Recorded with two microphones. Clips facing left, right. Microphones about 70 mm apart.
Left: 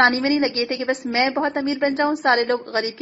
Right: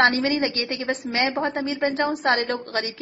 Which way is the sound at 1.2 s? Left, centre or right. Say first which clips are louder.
Left 3 dB; centre.